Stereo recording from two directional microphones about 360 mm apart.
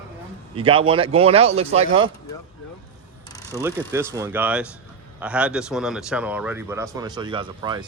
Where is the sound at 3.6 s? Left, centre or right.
Centre.